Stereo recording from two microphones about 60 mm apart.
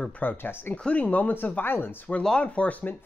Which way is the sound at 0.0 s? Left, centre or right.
Left.